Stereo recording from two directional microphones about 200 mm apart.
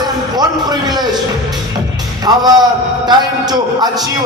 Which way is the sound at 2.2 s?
20° right (ahead or behind).